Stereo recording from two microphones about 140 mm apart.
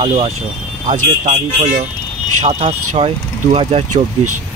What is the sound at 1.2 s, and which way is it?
Speech, 60° right (ahead or behind).